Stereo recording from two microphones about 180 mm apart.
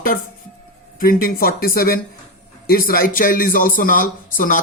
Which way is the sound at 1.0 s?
55° left (ahead or behind).